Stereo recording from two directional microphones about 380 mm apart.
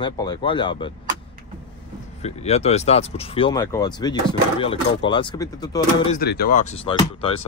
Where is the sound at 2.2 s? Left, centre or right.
Centre.